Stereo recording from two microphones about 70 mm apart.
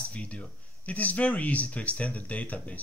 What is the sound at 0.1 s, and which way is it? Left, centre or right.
Speech, centre.